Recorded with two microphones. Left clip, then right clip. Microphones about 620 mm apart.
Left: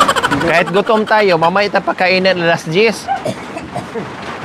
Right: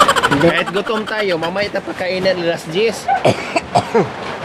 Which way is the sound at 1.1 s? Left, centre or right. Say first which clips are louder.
Left 9 dB; centre.